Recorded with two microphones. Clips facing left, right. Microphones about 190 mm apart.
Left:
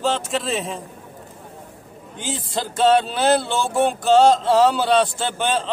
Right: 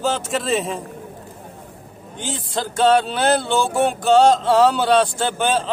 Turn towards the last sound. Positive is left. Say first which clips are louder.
# right 2 dB
turn(degrees=0)  # may be behind; listen again after turning